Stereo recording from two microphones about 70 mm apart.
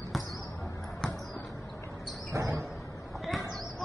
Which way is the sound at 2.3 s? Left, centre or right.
Right.